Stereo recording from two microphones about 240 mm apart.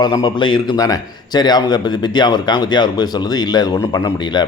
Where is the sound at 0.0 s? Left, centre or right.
Centre.